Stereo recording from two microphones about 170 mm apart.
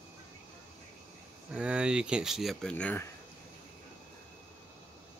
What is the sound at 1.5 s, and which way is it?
Speech, 5° right (ahead or behind).